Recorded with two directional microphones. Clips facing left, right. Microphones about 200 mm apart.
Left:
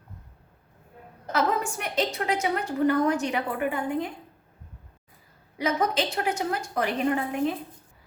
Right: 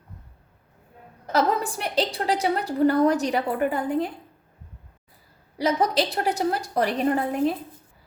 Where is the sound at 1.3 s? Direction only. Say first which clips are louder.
Right 3 dB; 35° right (ahead or behind).